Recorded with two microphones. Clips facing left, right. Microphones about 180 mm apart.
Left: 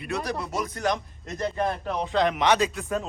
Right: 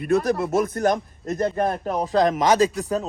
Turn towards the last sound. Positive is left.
turn(degrees=-40)  # may be behind; listen again after turning